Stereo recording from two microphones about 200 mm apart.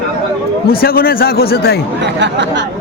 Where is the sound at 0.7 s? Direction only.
50° left (ahead or behind).